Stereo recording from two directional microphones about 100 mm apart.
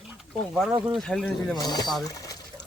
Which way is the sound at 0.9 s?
5° left (ahead or behind).